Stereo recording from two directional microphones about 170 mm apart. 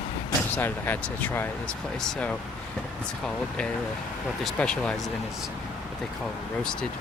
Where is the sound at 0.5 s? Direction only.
10° left (ahead or behind).